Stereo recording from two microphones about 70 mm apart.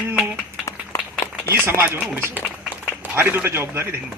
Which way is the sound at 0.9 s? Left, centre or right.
Left.